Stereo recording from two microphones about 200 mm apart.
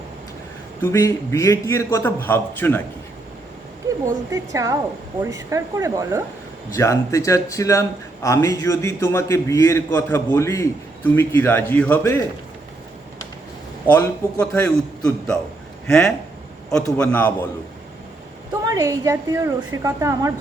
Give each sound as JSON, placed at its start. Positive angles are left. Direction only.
{"t": 0.8, "sound": "speech", "side_deg": 15}
{"t": 4.0, "sound": "a woman's voice", "side_deg": -15}
{"t": 6.7, "sound": "speech", "side_deg": 15}
{"t": 13.8, "sound": "speech", "side_deg": 10}
{"t": 18.6, "sound": "a woman's voice", "side_deg": -15}